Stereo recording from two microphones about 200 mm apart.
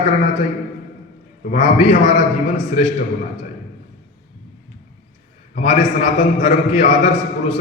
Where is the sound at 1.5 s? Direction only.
40° left (ahead or behind).